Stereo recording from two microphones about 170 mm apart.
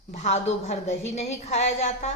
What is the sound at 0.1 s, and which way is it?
A woman's voice, 40° left (ahead or behind).